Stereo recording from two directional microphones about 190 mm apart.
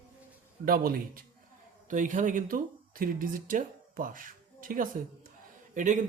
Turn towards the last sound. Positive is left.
turn(degrees=-40)  # may be behind; listen again after turning